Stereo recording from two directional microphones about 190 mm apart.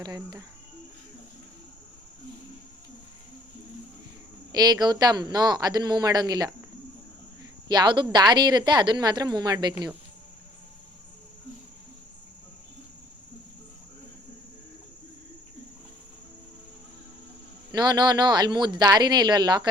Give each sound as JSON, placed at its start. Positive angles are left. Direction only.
{"t": 0.0, "sound": "a woman's voice", "side_deg": -20}
{"t": 4.5, "sound": "a woman's voice", "side_deg": -20}
{"t": 7.7, "sound": "a woman's voice", "side_deg": -25}
{"t": 17.7, "sound": "a woman's voice", "side_deg": -20}